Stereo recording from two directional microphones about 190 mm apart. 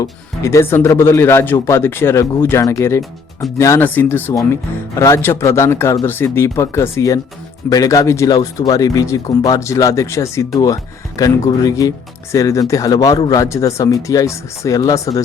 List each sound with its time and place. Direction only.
0.0 s speech: 15° left (ahead or behind)